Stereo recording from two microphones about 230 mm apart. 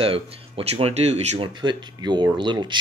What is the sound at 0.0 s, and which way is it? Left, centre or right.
Speech, right.